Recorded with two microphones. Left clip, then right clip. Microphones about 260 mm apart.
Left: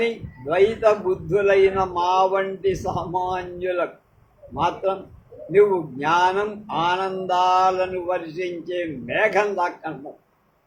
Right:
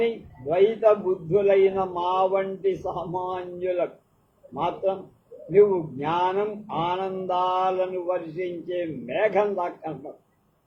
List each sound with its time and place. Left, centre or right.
0.0 s speech: left